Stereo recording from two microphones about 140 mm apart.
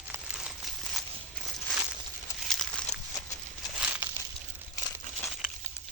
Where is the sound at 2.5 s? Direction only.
Centre (ahead or behind).